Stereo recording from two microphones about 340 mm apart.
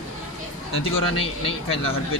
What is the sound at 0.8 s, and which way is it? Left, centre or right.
Speech, centre.